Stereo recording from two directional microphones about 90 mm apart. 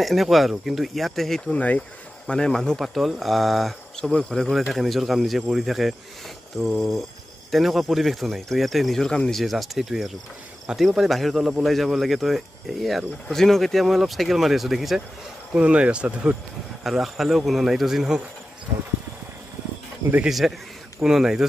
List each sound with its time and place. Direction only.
0.0 s speech: centre (ahead or behind)
1.5 s speech: 15° left (ahead or behind); by 15.0 s centre (ahead or behind)
15.5 s speech: 15° right (ahead or behind)
16.8 s speech: centre (ahead or behind)
20.2 s speech: 5° right (ahead or behind)